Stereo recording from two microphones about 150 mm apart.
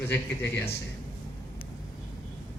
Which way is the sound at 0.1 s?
15° left (ahead or behind).